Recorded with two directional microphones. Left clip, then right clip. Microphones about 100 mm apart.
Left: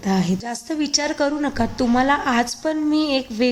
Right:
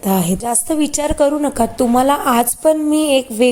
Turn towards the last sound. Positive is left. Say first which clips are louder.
# right 7 dB
turn(degrees=-45)  # may be behind; listen again after turning